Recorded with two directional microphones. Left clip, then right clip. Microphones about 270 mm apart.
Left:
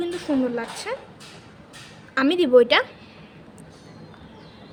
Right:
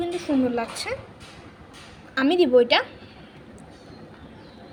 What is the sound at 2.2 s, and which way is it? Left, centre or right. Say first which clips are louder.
Speech: left 2 dB; centre.